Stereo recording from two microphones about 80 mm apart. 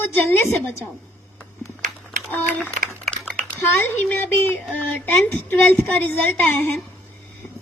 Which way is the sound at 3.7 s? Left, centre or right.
Left.